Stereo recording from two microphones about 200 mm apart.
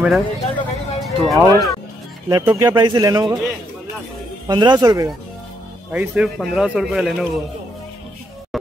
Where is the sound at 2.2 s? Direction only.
20° right (ahead or behind).